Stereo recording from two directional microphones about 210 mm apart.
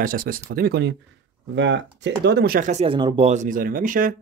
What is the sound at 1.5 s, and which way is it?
Speech, 60° right (ahead or behind).